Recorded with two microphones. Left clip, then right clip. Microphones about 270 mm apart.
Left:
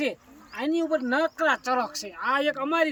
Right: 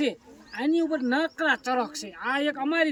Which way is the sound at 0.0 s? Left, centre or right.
Centre.